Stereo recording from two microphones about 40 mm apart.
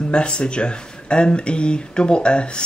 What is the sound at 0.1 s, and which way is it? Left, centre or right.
Speech, left.